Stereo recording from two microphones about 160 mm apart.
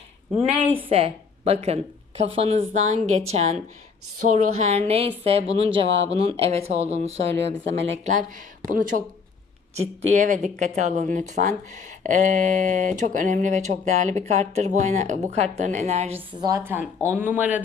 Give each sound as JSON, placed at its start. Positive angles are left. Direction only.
{"t": 0.4, "sound": "a woman's voice", "side_deg": -35}
{"t": 16.3, "sound": "a woman's voice", "side_deg": -25}